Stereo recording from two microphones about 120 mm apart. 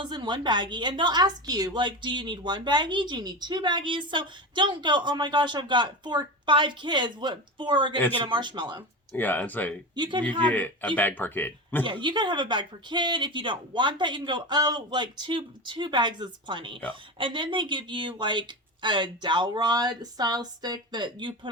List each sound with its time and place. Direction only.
0.0 s a woman's voice: 40° right (ahead or behind)
9.1 s speech: 15° left (ahead or behind)
9.9 s a woman's voice: 40° right (ahead or behind)
10.5 s speech: 15° left (ahead or behind)
11.9 s a woman's voice: 40° right (ahead or behind)